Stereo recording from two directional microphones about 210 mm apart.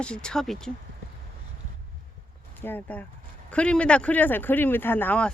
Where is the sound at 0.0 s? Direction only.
5° left (ahead or behind).